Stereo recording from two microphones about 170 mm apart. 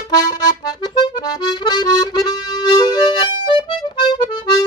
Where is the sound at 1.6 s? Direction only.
25° left (ahead or behind).